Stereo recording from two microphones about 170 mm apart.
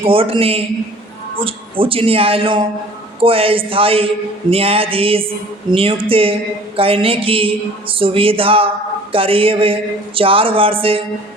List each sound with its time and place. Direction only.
0.0 s a woman's voice: 35° right (ahead or behind)